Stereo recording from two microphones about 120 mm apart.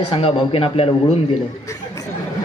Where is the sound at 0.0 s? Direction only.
45° left (ahead or behind).